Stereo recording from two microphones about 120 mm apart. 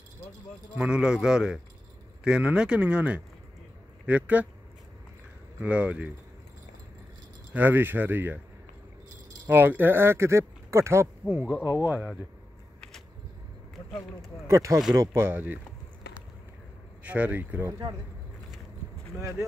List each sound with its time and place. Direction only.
0.7 s speech: 10° right (ahead or behind)
5.6 s speech: 10° right (ahead or behind)
7.5 s speech: 15° right (ahead or behind)
9.5 s speech: 15° right (ahead or behind)
14.5 s speech: 25° right (ahead or behind)
17.0 s speech: 10° right (ahead or behind)